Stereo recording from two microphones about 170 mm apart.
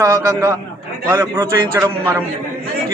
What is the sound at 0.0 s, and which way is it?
A man's voice, 15° right (ahead or behind).